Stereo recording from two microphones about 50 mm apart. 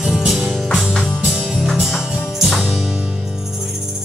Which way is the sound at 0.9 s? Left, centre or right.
Centre.